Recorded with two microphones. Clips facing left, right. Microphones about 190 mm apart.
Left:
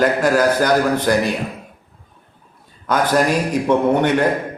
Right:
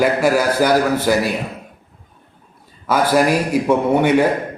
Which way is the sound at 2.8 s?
5° right (ahead or behind).